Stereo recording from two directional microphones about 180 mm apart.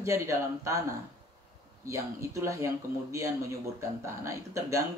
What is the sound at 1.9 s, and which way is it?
Speech, 15° right (ahead or behind).